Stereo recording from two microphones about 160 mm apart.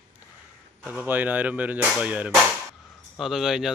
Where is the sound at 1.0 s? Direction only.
10° right (ahead or behind).